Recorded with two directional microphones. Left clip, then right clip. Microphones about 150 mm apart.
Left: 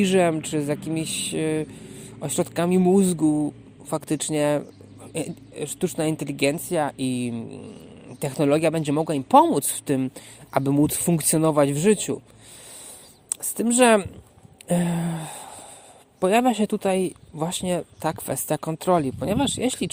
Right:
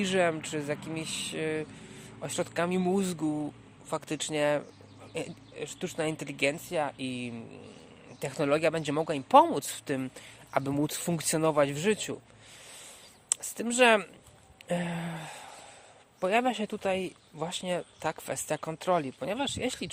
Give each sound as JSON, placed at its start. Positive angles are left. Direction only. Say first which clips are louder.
{"t": 0.0, "sound": "speech", "louder": "left 7 dB", "side_deg": 35}
{"t": 13.3, "sound": "speech", "louder": "left 7 dB", "side_deg": 30}
{"t": 14.7, "sound": "a sound", "louder": "left 7 dB", "side_deg": 35}
{"t": 16.2, "sound": "speech", "louder": "left 7 dB", "side_deg": 40}